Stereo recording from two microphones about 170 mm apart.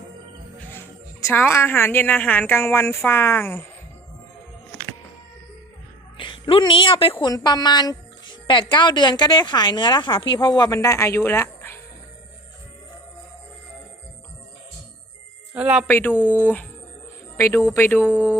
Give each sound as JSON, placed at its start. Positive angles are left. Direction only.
{"t": 1.2, "sound": "a woman's voice", "side_deg": 15}
{"t": 6.1, "sound": "a sound", "side_deg": 30}
{"t": 7.2, "sound": "speech", "side_deg": 25}
{"t": 15.5, "sound": "speech", "side_deg": -5}
{"t": 15.9, "sound": "a woman's voice", "side_deg": 10}
{"t": 17.3, "sound": "a woman's voice", "side_deg": 15}
{"t": 18.1, "sound": "speech", "side_deg": -10}